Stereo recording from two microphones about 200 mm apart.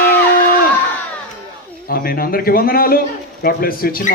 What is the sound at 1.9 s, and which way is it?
A man's voice, 50° left (ahead or behind).